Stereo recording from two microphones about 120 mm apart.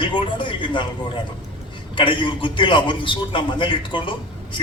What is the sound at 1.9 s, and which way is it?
A man's voice, 45° left (ahead or behind).